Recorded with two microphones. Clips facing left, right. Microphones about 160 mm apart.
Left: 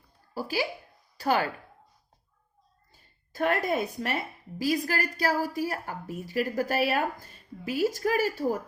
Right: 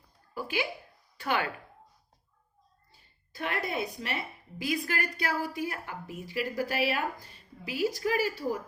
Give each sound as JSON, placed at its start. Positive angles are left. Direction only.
{"t": 0.3, "sound": "speech", "side_deg": 35}
{"t": 2.9, "sound": "a woman's voice", "side_deg": 45}